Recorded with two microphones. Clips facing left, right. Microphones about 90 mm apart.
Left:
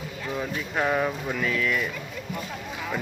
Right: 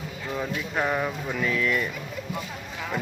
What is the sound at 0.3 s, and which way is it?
Speech, centre (ahead or behind).